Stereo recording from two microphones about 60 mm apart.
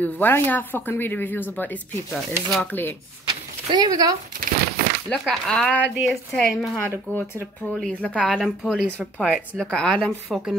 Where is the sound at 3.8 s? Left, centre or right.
Right.